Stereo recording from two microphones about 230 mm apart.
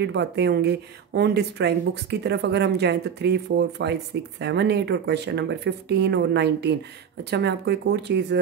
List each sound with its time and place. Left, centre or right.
0.0 s speech: right